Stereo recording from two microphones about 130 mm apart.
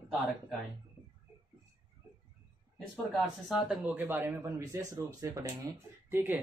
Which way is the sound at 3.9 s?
15° right (ahead or behind).